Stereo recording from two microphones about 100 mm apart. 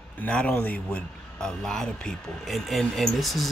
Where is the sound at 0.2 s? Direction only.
15° left (ahead or behind).